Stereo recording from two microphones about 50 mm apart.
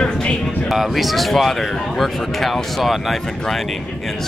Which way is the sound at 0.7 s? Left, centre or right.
Centre.